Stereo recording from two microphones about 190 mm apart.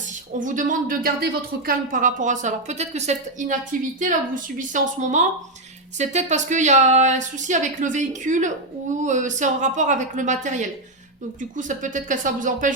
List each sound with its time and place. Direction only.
0.3 s speech: 45° right (ahead or behind)